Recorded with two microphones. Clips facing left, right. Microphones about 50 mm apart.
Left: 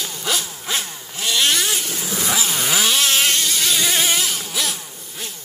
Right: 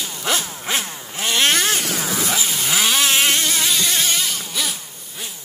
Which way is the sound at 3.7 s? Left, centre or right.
Centre.